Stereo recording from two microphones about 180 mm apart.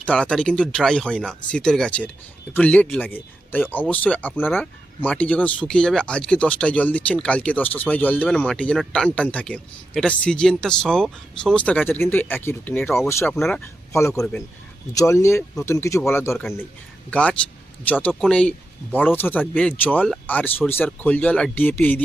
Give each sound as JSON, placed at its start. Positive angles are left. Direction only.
{"t": 0.0, "sound": "speech", "side_deg": 5}
{"t": 13.4, "sound": "speech", "side_deg": 5}
{"t": 13.9, "sound": "speech", "side_deg": 15}